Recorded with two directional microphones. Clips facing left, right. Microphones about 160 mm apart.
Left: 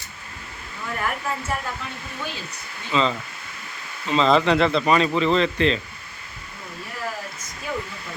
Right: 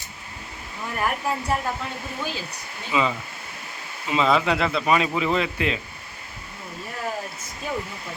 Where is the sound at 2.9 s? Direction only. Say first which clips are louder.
Left 1 dB; 10° right (ahead or behind).